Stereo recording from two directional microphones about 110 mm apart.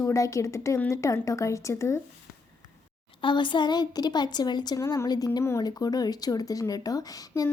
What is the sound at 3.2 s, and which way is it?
A woman's voice, 45° left (ahead or behind).